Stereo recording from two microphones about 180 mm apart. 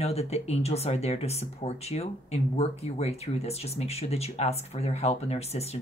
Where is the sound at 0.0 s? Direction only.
35° left (ahead or behind).